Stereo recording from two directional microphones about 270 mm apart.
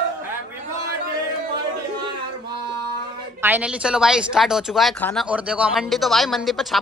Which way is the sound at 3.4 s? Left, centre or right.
Centre.